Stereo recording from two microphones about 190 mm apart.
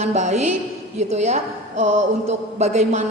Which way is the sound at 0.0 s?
35° right (ahead or behind).